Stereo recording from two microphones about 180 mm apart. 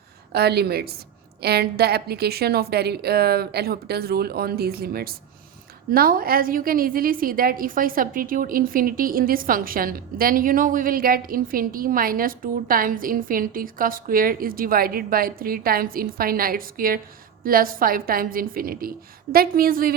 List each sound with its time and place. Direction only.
0.3 s a woman's voice: 65° right (ahead or behind)